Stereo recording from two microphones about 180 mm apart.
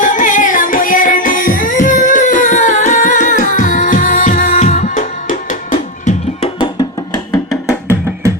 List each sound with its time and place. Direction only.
0.0 s music: 45° left (ahead or behind)